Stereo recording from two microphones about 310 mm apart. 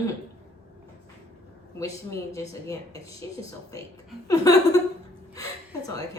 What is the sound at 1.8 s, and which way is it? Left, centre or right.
Speech, centre.